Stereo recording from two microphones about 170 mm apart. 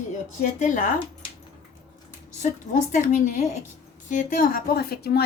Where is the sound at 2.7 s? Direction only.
45° left (ahead or behind); by 5.3 s 70° left (ahead or behind).